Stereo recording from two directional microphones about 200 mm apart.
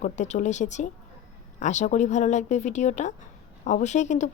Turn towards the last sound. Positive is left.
turn(degrees=35)  # may be behind; listen again after turning